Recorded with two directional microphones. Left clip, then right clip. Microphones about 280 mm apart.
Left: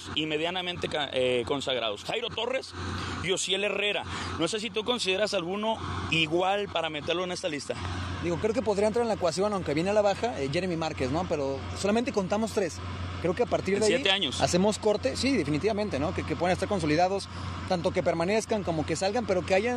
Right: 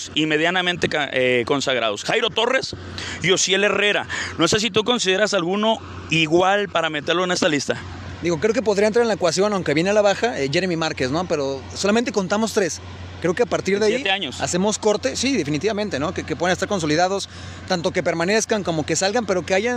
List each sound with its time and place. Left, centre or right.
0.1 s a man's voice: right